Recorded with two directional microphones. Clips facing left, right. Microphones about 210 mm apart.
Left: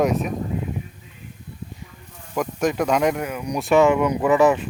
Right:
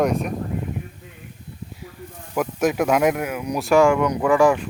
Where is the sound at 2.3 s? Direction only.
5° right (ahead or behind).